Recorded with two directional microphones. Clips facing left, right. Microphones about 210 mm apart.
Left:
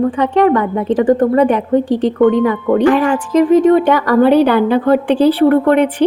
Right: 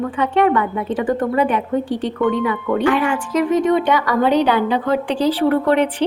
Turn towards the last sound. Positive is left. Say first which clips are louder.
# left 5 dB
turn(degrees=55)  # may be behind; listen again after turning